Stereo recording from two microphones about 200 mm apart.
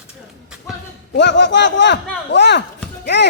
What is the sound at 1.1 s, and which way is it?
Speech, 60° left (ahead or behind).